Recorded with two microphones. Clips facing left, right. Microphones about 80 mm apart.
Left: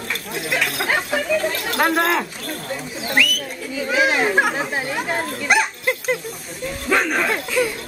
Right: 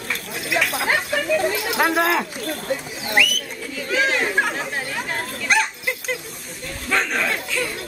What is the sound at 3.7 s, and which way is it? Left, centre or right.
Speech, centre.